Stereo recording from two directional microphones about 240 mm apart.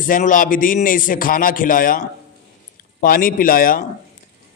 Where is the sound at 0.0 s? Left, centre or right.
Left.